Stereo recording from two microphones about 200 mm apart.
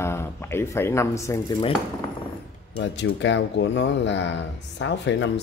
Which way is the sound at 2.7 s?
65° left (ahead or behind).